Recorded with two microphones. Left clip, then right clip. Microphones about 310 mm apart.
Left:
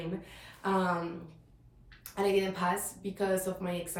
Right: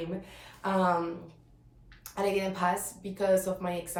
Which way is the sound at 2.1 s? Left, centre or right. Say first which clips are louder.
Even; centre.